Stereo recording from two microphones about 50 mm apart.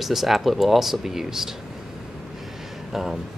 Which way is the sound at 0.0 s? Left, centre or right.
Centre.